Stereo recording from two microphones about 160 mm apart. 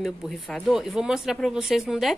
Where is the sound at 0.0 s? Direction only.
5° left (ahead or behind).